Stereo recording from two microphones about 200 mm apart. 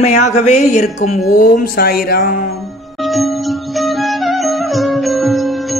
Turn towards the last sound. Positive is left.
turn(degrees=0)  # may be behind; listen again after turning